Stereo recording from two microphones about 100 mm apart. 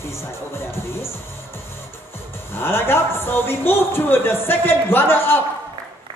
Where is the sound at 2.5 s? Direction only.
25° left (ahead or behind).